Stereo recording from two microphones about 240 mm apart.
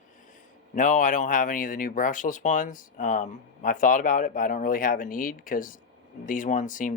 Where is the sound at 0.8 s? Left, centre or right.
Left.